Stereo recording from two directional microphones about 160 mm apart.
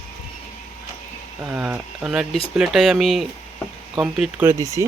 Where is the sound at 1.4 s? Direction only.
5° right (ahead or behind).